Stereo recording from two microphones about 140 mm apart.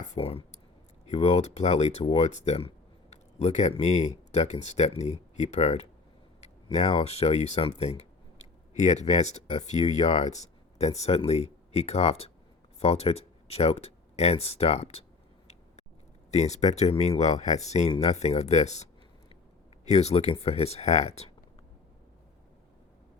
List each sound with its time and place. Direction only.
0.1 s speech: 45° left (ahead or behind)
16.3 s speech: 55° left (ahead or behind)
19.9 s speech: 50° left (ahead or behind)